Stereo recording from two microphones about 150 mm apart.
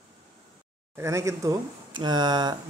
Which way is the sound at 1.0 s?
20° right (ahead or behind).